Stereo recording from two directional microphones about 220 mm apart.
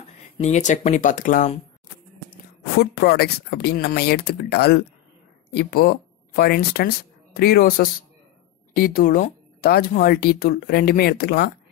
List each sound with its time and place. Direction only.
0.4 s speech: 30° left (ahead or behind)
2.8 s speech: 45° left (ahead or behind)